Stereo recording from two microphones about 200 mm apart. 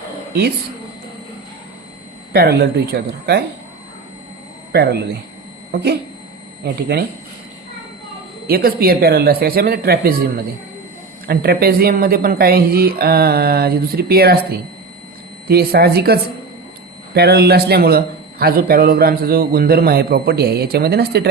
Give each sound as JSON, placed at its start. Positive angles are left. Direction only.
{"t": 2.3, "sound": "a man's voice", "side_deg": -50}
{"t": 4.7, "sound": "a man's voice", "side_deg": -55}
{"t": 8.4, "sound": "a man's voice", "side_deg": -50}
{"t": 17.2, "sound": "a man's voice", "side_deg": -50}